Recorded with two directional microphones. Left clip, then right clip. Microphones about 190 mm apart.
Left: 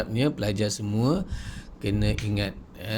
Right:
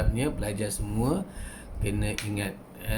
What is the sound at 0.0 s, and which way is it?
Speech, 50° left (ahead or behind).